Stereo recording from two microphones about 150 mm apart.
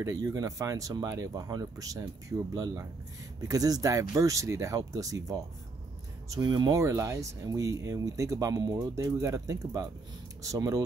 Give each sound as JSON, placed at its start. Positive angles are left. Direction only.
{"t": 0.0, "sound": "speech", "side_deg": -25}